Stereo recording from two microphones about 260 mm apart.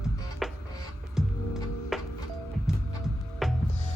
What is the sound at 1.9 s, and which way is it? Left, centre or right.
Music, centre.